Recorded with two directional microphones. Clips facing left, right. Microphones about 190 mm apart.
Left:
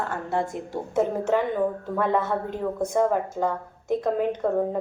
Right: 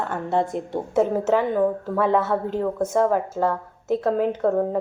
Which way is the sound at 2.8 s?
5° right (ahead or behind).